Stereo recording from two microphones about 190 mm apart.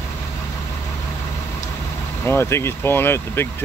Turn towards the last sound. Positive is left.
turn(degrees=10)  # may be behind; listen again after turning